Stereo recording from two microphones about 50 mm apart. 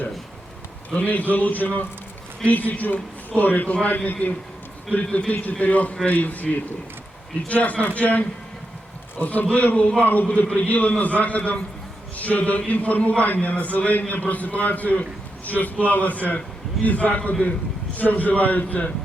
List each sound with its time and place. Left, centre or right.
0.9 s a man's voice: left
10.3 s a man's voice: left